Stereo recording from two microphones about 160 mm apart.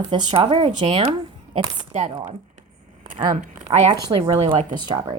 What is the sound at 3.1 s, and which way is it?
Speech, 40° right (ahead or behind).